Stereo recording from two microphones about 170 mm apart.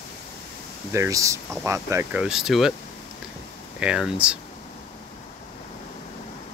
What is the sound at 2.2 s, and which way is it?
Speech, 5° right (ahead or behind).